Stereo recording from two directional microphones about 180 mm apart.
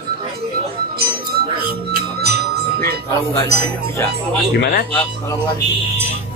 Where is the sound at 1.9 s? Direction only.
60° right (ahead or behind).